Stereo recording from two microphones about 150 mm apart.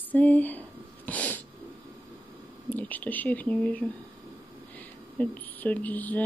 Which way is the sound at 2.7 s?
10° left (ahead or behind).